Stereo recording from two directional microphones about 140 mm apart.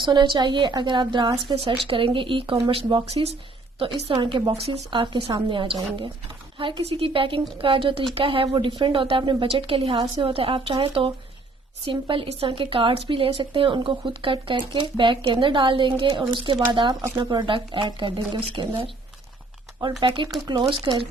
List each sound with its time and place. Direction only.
0.0 s a woman's voice: 35° right (ahead or behind)
20.0 s a woman's voice: 35° right (ahead or behind)